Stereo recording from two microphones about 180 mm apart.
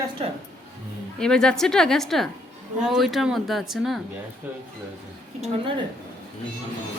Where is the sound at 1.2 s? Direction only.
5° left (ahead or behind).